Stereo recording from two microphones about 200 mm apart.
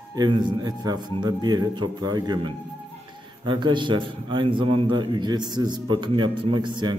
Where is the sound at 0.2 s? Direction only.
20° right (ahead or behind).